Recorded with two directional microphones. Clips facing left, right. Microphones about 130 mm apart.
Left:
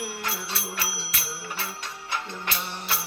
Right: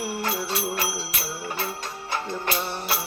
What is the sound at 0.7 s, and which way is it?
Music, 40° right (ahead or behind).